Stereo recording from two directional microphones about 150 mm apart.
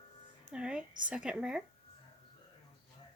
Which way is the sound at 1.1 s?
5° right (ahead or behind).